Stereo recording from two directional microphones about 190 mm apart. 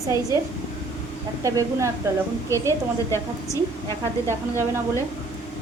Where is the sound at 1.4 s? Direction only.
15° right (ahead or behind).